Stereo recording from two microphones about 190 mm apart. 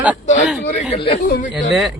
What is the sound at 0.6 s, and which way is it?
Speech, 30° left (ahead or behind).